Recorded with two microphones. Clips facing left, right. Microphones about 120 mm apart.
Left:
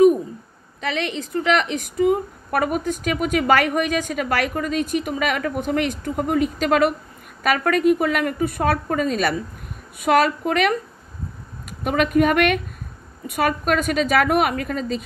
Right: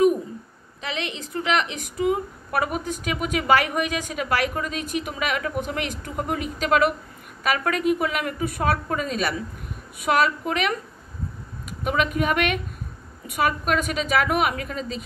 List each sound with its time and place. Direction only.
0.7 s a woman's voice: 50° left (ahead or behind)
11.8 s a woman's voice: 50° left (ahead or behind)